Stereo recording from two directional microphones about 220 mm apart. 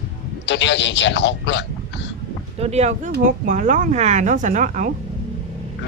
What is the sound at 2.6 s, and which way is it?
Speech, 30° right (ahead or behind).